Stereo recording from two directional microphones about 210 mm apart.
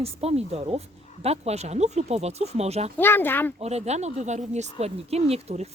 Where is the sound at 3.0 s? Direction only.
10° left (ahead or behind).